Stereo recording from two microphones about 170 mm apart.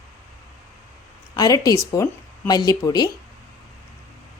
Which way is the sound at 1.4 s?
20° left (ahead or behind).